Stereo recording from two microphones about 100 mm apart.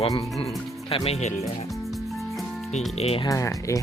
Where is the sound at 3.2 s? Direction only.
30° left (ahead or behind).